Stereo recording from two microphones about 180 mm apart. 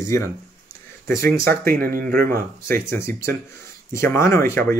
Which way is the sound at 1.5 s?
55° right (ahead or behind).